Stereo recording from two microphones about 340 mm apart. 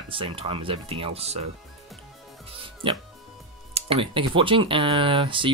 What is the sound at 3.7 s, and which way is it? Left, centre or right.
Speech, centre.